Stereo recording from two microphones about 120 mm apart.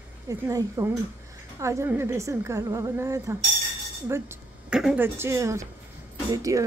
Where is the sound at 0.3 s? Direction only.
30° right (ahead or behind).